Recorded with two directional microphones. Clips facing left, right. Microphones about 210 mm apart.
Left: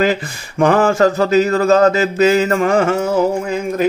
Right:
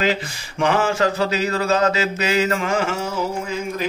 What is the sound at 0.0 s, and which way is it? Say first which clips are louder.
Speech: left 5 dB; 50° left (ahead or behind).